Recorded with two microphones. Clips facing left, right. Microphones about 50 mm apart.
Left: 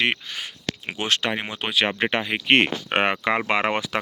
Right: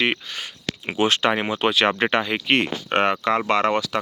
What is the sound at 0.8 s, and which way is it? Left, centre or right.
Speech, centre.